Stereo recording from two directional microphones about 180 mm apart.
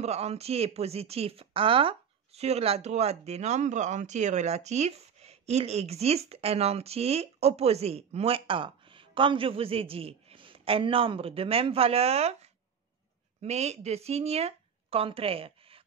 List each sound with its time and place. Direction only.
0.0 s speech: 35° right (ahead or behind)